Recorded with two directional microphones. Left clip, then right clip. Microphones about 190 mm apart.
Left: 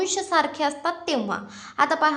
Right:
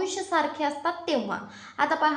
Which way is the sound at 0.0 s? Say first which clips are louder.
Left 4 dB; 30° left (ahead or behind).